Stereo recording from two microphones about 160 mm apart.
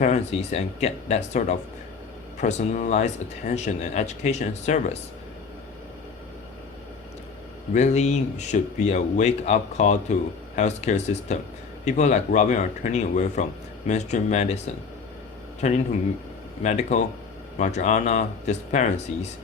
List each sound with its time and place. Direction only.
0.0 s speech: 45° left (ahead or behind)
7.7 s speech: 45° left (ahead or behind)
15.6 s speech: 45° left (ahead or behind)